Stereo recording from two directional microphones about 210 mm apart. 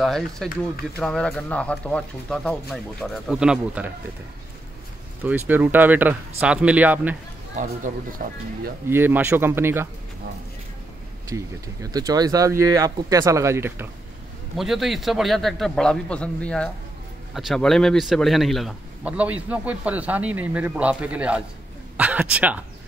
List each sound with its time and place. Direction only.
0.0 s a man's voice: centre (ahead or behind)
5.2 s speech: 10° right (ahead or behind)
8.2 s speech: 45° right (ahead or behind)
8.8 s speech: 10° right (ahead or behind)
11.2 s a man's voice: 15° right (ahead or behind)